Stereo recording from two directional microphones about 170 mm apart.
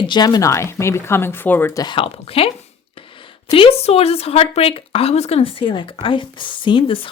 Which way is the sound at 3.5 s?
35° left (ahead or behind).